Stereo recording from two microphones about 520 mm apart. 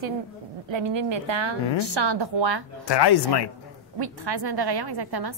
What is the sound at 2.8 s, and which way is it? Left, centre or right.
Speech, left.